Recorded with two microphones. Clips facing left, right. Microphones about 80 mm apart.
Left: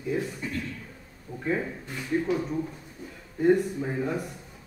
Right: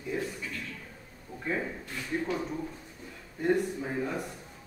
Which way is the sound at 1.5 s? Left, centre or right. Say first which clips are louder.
Left 4 dB; centre.